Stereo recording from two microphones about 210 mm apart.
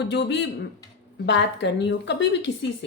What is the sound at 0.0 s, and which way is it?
Speech, 55° left (ahead or behind).